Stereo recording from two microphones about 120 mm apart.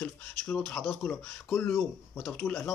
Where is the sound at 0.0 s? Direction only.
5° left (ahead or behind).